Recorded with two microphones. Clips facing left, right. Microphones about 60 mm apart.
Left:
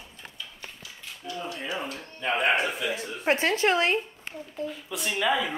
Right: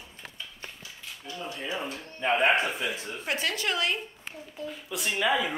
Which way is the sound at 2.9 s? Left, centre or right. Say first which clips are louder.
Left 6 dB; left.